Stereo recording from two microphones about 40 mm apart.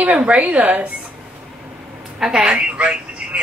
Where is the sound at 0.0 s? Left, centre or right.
Right.